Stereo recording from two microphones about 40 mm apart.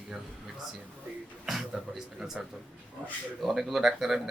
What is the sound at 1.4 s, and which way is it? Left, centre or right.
Speech, centre.